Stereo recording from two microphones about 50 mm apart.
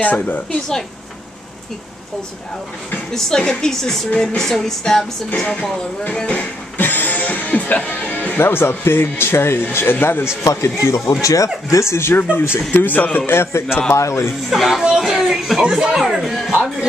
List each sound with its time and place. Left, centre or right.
0.0 s a woman's voice: left
3.1 s speech: centre
6.2 s speech: left
6.8 s music: left
8.4 s speech: left
10.4 s speech: left
12.7 s a woman's voice: left
13.3 s a man's voice: left
13.9 s speech: left
14.5 s speech: centre
15.6 s speech: centre
16.0 s speech: centre